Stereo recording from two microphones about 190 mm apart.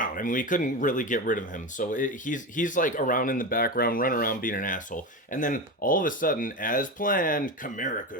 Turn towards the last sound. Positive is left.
turn(degrees=40)  # may be behind; listen again after turning